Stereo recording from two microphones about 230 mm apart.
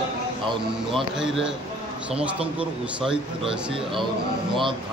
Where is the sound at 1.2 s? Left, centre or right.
Centre.